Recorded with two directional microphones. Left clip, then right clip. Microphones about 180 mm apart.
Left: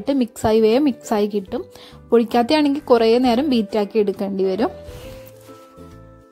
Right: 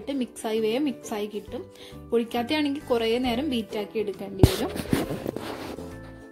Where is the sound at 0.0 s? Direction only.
45° left (ahead or behind).